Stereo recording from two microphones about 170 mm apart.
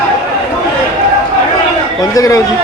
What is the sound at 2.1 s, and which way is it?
Speech, 20° left (ahead or behind).